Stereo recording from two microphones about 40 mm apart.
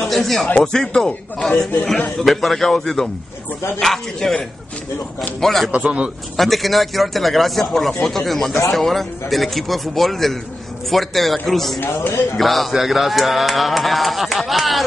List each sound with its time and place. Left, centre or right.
0.0 s a sound: centre
0.6 s a man's voice: centre
1.5 s speech: left
2.0 s a man's voice: centre
5.4 s a man's voice: centre
5.7 s a man's voice: right
6.3 s speech: centre
11.8 s a man's voice: left
12.4 s speech: centre